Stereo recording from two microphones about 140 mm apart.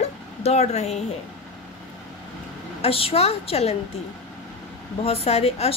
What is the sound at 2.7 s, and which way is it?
A woman's voice, 45° left (ahead or behind).